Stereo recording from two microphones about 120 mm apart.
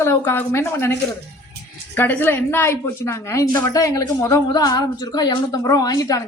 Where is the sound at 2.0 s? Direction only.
15° left (ahead or behind).